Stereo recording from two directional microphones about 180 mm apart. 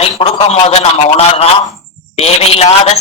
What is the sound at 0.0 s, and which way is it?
A man's voice, 35° left (ahead or behind).